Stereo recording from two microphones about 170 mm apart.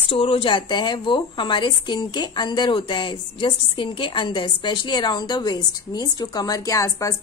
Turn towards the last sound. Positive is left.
turn(degrees=20)  # may be behind; listen again after turning